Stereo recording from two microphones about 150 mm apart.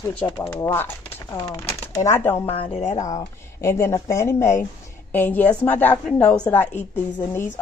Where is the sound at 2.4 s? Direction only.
40° left (ahead or behind).